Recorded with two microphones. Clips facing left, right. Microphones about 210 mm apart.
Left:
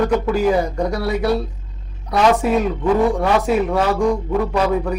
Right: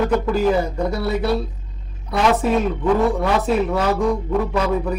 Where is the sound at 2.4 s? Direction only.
Centre (ahead or behind).